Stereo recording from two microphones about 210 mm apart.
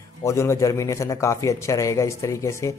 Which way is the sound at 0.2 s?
15° left (ahead or behind).